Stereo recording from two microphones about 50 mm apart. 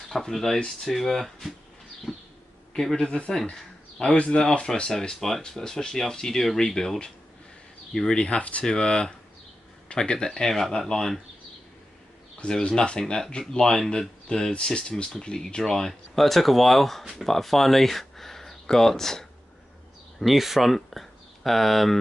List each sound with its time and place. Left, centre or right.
0.1 s a man's voice: centre
3.1 s speech: left
5.2 s speech: centre
12.4 s speech: centre
20.2 s speech: centre